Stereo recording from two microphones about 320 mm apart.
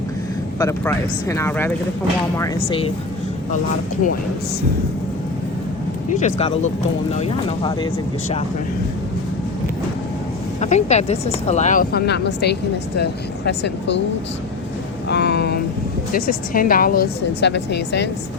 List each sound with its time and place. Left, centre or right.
0.6 s speech: centre
6.1 s a woman's voice: left
10.6 s a woman's voice: left
15.1 s a woman's voice: left